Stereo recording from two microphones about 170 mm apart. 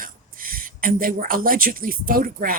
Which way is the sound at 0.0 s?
55° right (ahead or behind).